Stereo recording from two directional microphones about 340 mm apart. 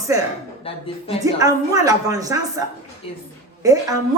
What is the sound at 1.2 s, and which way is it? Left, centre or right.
A woman's voice, centre.